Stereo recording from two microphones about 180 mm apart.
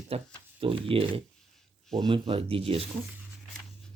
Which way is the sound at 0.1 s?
35° right (ahead or behind).